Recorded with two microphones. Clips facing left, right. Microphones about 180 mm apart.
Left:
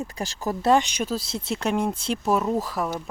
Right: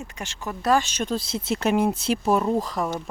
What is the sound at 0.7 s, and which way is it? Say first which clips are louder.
Speech: left 1 dB; 15° left (ahead or behind).